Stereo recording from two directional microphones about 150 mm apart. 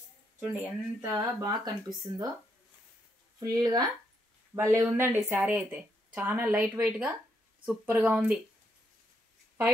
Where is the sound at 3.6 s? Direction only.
25° right (ahead or behind); by 8.4 s 10° right (ahead or behind).